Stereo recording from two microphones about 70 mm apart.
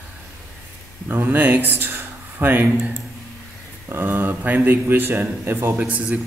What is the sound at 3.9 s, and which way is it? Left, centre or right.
A man's voice, right.